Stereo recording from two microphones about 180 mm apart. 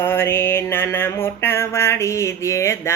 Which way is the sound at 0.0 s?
15° left (ahead or behind).